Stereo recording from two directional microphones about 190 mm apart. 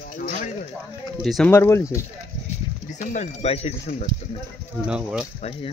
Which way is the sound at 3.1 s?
35° left (ahead or behind).